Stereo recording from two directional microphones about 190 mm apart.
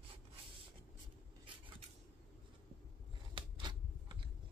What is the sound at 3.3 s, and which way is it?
Scissors, 25° right (ahead or behind).